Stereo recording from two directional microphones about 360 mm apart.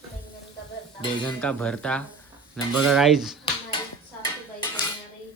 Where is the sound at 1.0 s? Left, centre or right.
Centre.